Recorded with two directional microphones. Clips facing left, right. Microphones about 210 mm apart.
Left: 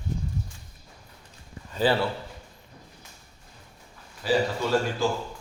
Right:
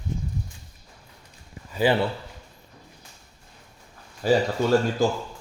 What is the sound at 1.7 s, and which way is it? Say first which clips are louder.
Speech: right 2 dB; 15° right (ahead or behind).